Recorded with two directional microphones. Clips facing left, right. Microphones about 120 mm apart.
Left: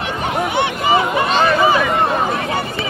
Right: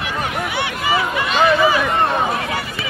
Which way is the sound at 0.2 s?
25° left (ahead or behind).